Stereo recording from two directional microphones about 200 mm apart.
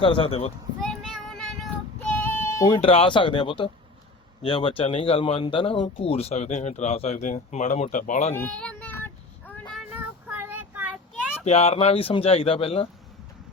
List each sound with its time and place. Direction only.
0.0 s speech: 25° left (ahead or behind)
0.8 s child singing: centre (ahead or behind)
2.1 s speech: 10° left (ahead or behind); by 8.4 s 35° left (ahead or behind)
8.4 s child singing: 5° left (ahead or behind)
9.9 s child singing: 10° right (ahead or behind)
11.4 s speech: 30° left (ahead or behind)